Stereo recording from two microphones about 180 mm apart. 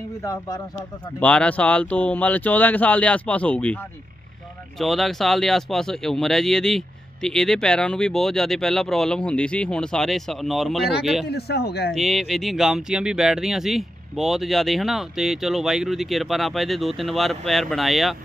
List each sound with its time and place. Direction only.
0.2 s speech: 20° left (ahead or behind)
1.2 s speech: 5° left (ahead or behind)
11.2 s a man's voice: 65° left (ahead or behind)
11.9 s speech: centre (ahead or behind)